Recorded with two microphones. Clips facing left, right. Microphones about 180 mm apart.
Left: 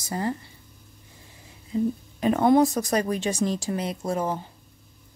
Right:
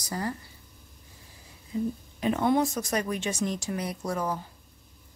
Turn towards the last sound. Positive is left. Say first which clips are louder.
# left 3 dB
turn(degrees=25)  # may be behind; listen again after turning